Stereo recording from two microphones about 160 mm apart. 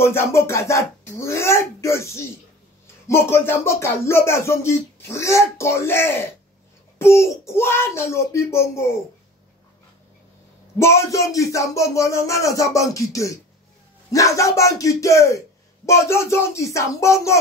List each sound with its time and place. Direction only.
0.0 s speech: 15° left (ahead or behind)
10.8 s speech: 15° left (ahead or behind)